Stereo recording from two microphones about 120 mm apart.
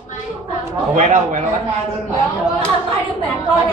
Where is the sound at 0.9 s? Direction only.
80° right.